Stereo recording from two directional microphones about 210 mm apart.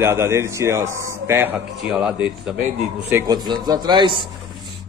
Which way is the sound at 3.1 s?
15° right (ahead or behind).